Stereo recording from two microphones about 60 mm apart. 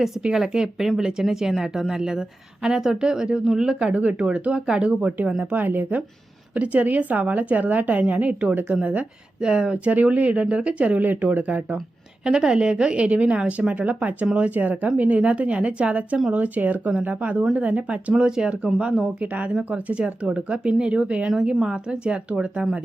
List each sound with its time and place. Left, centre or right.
0.2 s speech: centre
12.2 s speech: centre